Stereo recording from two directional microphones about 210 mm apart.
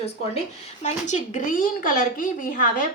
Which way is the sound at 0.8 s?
35° left (ahead or behind).